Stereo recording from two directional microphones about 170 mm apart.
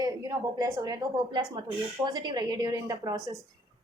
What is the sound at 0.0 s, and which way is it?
A woman's voice, 20° right (ahead or behind).